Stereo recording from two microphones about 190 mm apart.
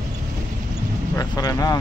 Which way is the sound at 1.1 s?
20° left (ahead or behind).